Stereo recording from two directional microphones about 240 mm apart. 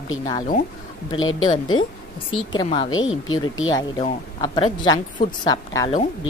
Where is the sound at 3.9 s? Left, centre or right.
Left.